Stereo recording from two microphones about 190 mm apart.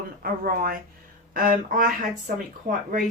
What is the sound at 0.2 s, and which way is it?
Speech, 50° right (ahead or behind).